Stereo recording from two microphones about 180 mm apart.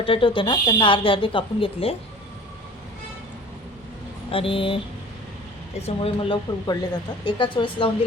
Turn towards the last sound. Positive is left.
turn(degrees=30)  # may be behind; listen again after turning